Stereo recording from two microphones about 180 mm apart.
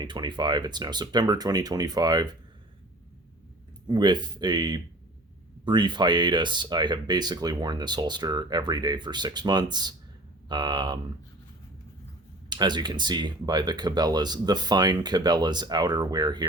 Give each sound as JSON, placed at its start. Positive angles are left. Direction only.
{"t": 0.0, "sound": "speech", "side_deg": -25}
{"t": 3.8, "sound": "speech", "side_deg": -25}
{"t": 12.5, "sound": "speech", "side_deg": -25}